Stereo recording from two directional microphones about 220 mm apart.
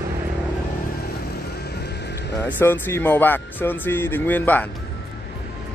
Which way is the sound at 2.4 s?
10° left (ahead or behind).